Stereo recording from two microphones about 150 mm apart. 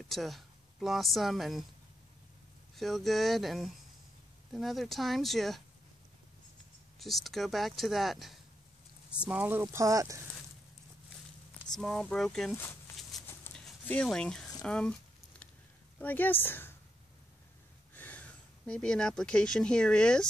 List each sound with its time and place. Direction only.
0.1 s speech: centre (ahead or behind)
2.7 s speech: centre (ahead or behind)
7.0 s speech: centre (ahead or behind); by 10.2 s 20° right (ahead or behind)
11.7 s speech: 5° left (ahead or behind)
12.5 s a sound: 15° left (ahead or behind)
16.0 s a woman's voice: 10° left (ahead or behind)
17.9 s speech: 10° left (ahead or behind)